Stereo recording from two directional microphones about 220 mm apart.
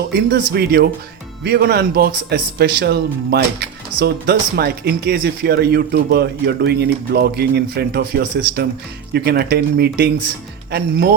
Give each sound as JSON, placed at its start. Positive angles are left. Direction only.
{"t": 0.1, "sound": "a man's voice", "side_deg": -45}